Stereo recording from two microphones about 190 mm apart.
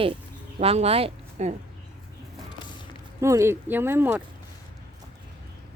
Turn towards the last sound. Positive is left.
turn(degrees=-10)  # may be behind; listen again after turning